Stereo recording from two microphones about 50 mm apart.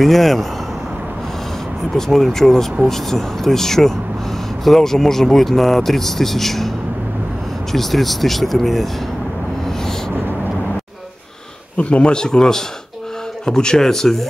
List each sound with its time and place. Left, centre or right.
0.0 s speech: centre
2.0 s speech: centre
7.7 s speech: centre
11.7 s speech: left; by 14.2 s centre